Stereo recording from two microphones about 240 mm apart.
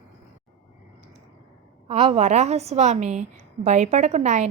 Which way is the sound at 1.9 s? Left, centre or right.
Right.